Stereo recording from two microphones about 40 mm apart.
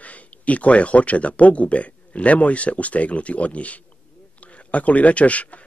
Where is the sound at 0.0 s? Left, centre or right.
Left.